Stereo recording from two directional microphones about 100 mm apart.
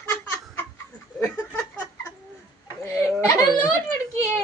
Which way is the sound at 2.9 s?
35° left (ahead or behind).